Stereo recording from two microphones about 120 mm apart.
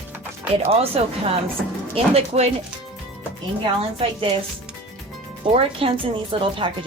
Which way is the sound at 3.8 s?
50° right (ahead or behind).